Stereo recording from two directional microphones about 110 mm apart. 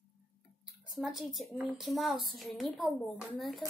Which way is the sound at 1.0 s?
5° right (ahead or behind).